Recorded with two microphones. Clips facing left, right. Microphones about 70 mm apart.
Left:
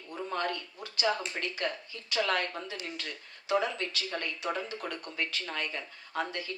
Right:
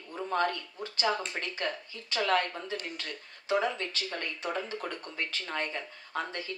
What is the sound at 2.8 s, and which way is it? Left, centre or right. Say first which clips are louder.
Speech: even; right.